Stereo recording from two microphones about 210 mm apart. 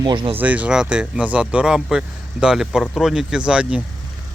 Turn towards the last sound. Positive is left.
turn(degrees=-5)  # may be behind; listen again after turning